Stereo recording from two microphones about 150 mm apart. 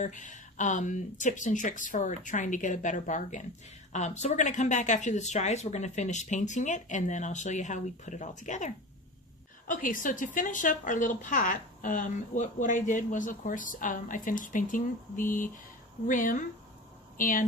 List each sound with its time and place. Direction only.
0.0 s a woman's voice: 55° left (ahead or behind)